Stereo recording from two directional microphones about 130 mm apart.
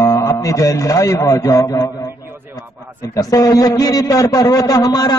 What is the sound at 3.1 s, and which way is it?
A man's voice, 30° left (ahead or behind).